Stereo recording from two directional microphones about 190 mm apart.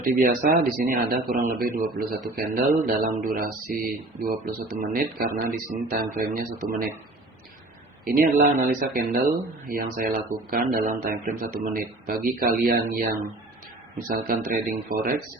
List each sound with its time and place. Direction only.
0.0 s speech: 45° right (ahead or behind)
8.0 s speech: 45° right (ahead or behind)
14.1 s speech: 45° right (ahead or behind)